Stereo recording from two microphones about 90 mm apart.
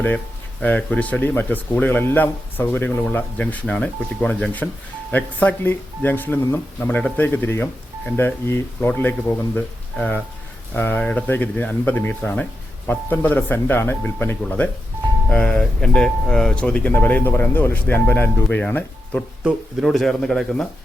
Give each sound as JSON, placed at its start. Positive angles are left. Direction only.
{"t": 0.6, "sound": "speech", "side_deg": 15}
{"t": 14.4, "sound": "speech", "side_deg": 10}
{"t": 19.5, "sound": "speech", "side_deg": 0}